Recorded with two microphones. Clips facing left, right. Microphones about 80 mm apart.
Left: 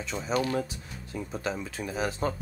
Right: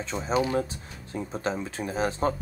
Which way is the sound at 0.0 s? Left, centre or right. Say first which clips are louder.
Right 2 dB; right.